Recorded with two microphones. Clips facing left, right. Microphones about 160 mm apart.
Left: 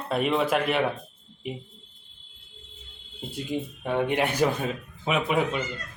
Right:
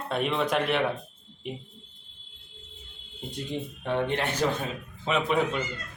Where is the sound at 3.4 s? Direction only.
10° left (ahead or behind).